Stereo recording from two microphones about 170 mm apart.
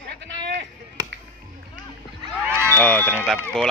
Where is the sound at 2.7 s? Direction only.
10° left (ahead or behind).